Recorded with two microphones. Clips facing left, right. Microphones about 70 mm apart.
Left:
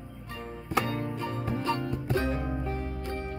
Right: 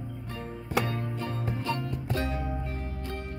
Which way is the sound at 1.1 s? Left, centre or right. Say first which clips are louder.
Left 1 dB; centre.